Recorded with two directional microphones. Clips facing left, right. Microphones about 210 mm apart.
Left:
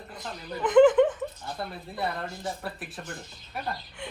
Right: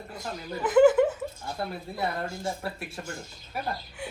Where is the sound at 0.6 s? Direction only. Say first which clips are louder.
Left 1 dB; 5° right (ahead or behind).